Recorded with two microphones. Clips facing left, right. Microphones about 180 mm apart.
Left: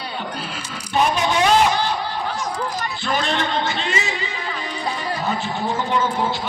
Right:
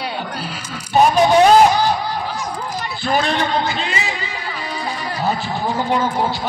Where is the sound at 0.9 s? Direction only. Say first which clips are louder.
Right 7 dB; 40° right (ahead or behind).